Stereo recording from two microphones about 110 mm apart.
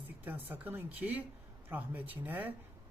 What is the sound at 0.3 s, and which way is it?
Speech, 15° right (ahead or behind).